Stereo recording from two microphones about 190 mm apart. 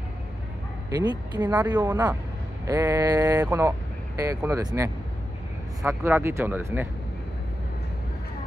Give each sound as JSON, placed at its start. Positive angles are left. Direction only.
{"t": 0.8, "sound": "speech", "side_deg": -20}
{"t": 1.4, "sound": "speech", "side_deg": -10}